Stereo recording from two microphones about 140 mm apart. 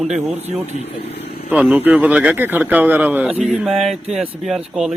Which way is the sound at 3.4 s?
Centre (ahead or behind).